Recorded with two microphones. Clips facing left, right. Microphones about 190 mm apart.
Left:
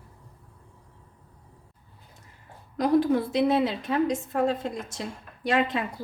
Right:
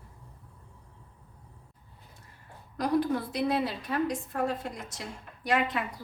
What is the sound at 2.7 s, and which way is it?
A woman's voice, 25° left (ahead or behind).